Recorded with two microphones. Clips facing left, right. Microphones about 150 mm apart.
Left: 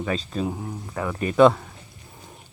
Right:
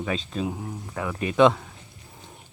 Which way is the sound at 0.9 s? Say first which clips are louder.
Left 2 dB; centre (ahead or behind).